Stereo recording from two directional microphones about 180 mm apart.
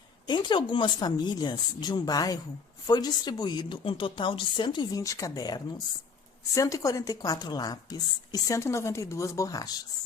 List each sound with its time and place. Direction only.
0.3 s a woman's voice: 25° left (ahead or behind)